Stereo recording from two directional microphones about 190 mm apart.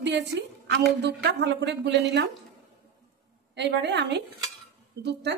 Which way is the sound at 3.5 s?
65° right (ahead or behind).